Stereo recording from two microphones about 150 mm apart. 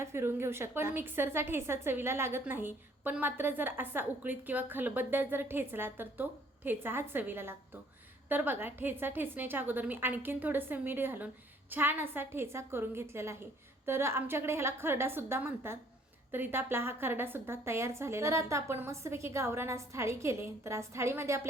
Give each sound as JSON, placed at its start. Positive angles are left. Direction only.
{"t": 0.0, "sound": "a woman's voice", "side_deg": -15}